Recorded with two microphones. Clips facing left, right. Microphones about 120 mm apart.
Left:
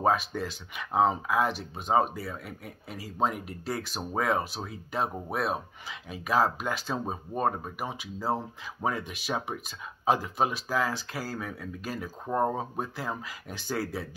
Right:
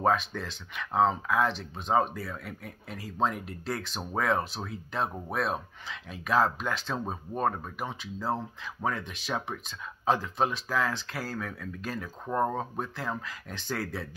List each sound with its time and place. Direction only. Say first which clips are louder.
0.0 s speech: left 1 dB; 5° left (ahead or behind)
12.3 s speech: left 1 dB; 15° left (ahead or behind)
12.5 s speech: even; 5° left (ahead or behind)